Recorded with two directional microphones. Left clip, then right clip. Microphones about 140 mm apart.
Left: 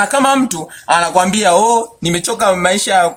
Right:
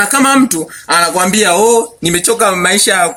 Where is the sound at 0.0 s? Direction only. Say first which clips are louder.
Right 2 dB; 25° left (ahead or behind).